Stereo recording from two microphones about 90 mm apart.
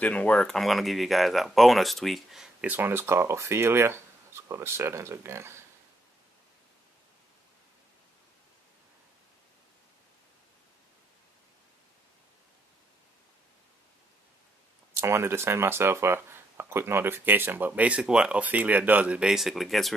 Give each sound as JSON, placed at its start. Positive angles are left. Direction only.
{"t": 0.0, "sound": "speech", "side_deg": 15}
{"t": 2.6, "sound": "speech", "side_deg": -20}
{"t": 15.0, "sound": "speech", "side_deg": -30}